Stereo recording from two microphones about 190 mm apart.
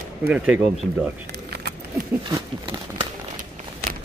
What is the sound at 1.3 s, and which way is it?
Vehicle, 60° right (ahead or behind).